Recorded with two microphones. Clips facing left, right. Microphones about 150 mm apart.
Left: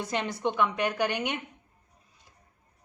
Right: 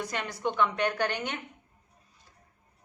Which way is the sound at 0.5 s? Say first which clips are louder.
Right 2 dB; 10° left (ahead or behind).